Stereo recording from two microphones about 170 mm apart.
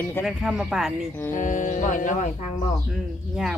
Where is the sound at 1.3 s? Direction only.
50° left (ahead or behind).